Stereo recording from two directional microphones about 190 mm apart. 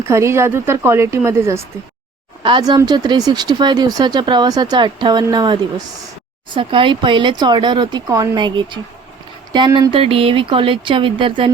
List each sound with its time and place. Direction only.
0.1 s speech: 15° right (ahead or behind)